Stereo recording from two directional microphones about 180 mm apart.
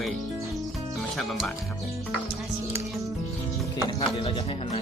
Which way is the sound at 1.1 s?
Centre (ahead or behind).